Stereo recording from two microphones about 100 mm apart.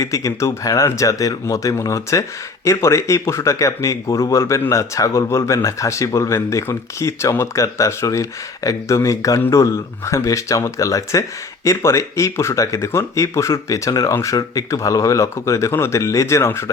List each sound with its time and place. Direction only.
0.0 s speech: 35° left (ahead or behind)